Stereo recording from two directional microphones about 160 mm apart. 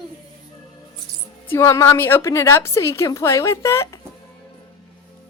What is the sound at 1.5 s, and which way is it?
A woman's voice, 20° left (ahead or behind).